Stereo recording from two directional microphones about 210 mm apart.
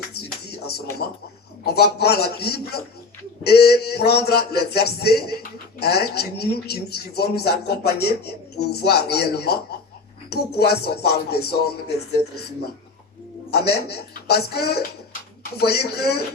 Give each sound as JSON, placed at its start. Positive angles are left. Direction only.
{"t": 0.1, "sound": "a sound", "side_deg": 50}
{"t": 1.6, "sound": "speech", "side_deg": 50}
{"t": 13.5, "sound": "speech", "side_deg": 50}